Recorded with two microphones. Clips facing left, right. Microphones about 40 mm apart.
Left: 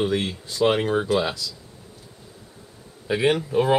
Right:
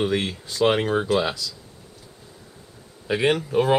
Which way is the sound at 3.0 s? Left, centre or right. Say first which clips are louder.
Even; centre.